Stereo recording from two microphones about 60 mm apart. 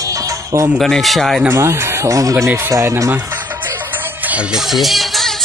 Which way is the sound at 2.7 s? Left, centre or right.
Right.